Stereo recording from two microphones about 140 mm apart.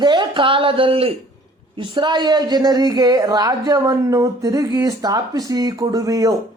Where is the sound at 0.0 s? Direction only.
35° right (ahead or behind).